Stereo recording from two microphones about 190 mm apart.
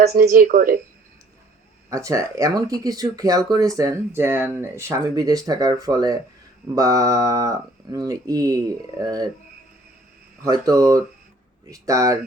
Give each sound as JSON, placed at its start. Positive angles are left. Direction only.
{"t": 0.1, "sound": "speech", "side_deg": -50}
{"t": 1.9, "sound": "speech", "side_deg": -15}
{"t": 6.7, "sound": "mantra", "side_deg": -20}
{"t": 7.9, "sound": "speech", "side_deg": -20}
{"t": 10.4, "sound": "mantra", "side_deg": -20}